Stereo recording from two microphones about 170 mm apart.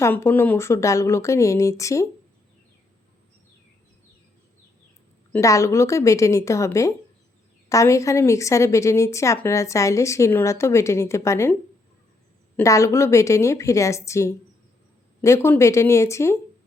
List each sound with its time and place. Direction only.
0.0 s a woman's voice: 15° left (ahead or behind)
5.3 s a woman's voice: 20° left (ahead or behind)
12.5 s a woman's voice: 20° left (ahead or behind)